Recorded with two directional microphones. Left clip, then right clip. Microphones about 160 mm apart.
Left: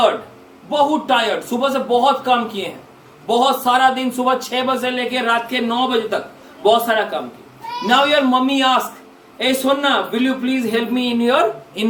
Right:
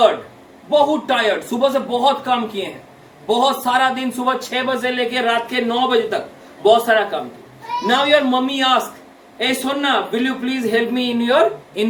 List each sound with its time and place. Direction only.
0.7 s a man's voice: 10° left (ahead or behind)